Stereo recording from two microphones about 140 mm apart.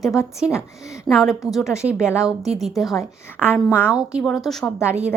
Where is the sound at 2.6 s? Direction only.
Centre (ahead or behind).